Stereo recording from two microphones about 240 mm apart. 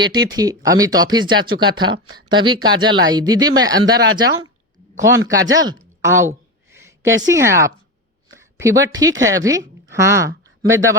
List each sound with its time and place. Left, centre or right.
0.0 s speech: centre
4.3 s speech: right
5.0 s a woman's voice: centre